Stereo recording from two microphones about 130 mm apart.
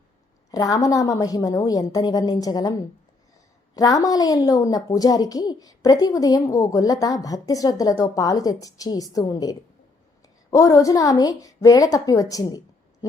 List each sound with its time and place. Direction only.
0.5 s a woman's voice: 30° left (ahead or behind)
3.8 s a woman's voice: 25° left (ahead or behind)